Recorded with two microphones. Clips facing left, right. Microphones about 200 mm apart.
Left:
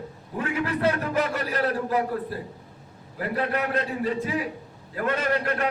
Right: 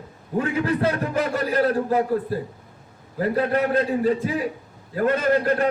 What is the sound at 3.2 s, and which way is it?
A man's voice, 30° right (ahead or behind).